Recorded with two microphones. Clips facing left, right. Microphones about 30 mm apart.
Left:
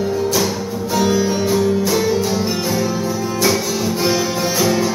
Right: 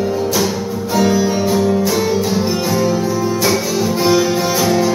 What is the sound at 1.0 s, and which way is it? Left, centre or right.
Music, centre.